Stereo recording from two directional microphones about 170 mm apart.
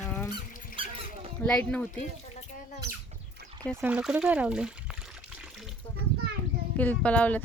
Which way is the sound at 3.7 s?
10° right (ahead or behind).